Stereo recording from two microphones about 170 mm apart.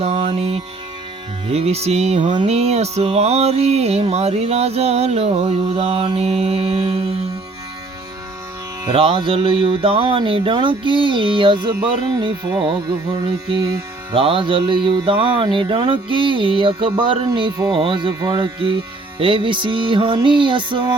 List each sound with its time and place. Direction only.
0.0 s music: 35° right (ahead or behind)
1.5 s music: 35° right (ahead or behind)
8.8 s music: 30° right (ahead or behind)
14.1 s music: 30° right (ahead or behind)